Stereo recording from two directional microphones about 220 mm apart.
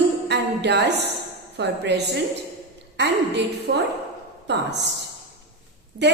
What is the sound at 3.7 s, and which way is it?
Speech, 50° right (ahead or behind).